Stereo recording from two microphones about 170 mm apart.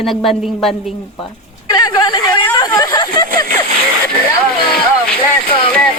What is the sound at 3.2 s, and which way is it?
Speech, 55° right (ahead or behind).